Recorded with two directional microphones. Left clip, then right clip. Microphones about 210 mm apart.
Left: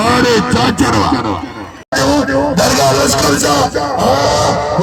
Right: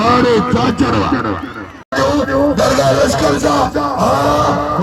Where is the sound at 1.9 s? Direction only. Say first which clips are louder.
Left 1 dB; 55° left (ahead or behind).